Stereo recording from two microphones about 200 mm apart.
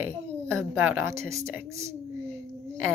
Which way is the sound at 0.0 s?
10° right (ahead or behind).